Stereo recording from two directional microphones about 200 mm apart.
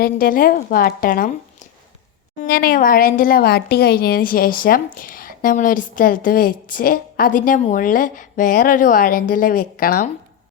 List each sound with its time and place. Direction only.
0.0 s speech: 45° left (ahead or behind)
2.4 s speech: 45° left (ahead or behind)